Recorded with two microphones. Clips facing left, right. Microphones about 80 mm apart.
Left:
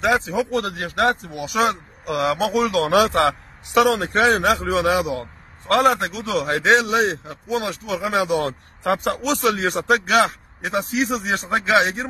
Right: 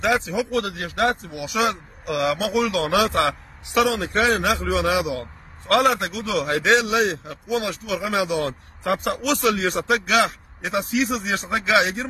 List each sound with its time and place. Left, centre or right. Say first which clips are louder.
0.0 s speech: left 2 dB; left
3.7 s a man's voice: left 3 dB; left